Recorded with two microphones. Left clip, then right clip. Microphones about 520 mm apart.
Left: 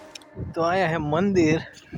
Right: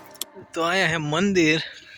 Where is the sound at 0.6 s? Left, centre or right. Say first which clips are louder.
Right 1 dB; right.